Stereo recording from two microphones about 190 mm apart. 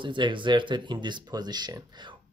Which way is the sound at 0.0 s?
25° right (ahead or behind).